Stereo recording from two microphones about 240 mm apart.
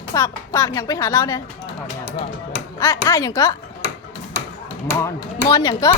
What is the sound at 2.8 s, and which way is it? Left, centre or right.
Speech, centre.